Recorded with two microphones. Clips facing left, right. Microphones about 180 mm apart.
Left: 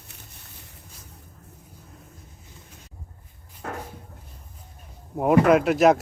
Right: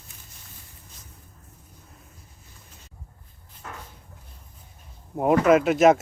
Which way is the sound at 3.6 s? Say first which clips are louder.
Left 7 dB; 60° left (ahead or behind).